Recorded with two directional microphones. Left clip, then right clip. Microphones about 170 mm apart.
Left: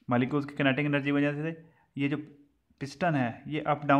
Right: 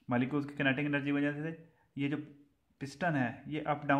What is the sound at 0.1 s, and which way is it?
Speech, 25° left (ahead or behind).